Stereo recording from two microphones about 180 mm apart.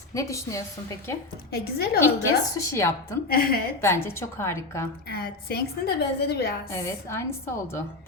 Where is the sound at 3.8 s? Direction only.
15° left (ahead or behind).